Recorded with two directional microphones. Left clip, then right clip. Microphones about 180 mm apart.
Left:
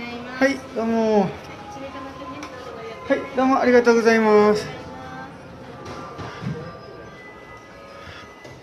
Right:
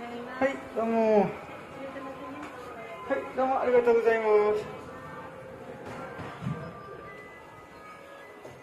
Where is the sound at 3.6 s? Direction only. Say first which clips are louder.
Left 7 dB; 20° left (ahead or behind).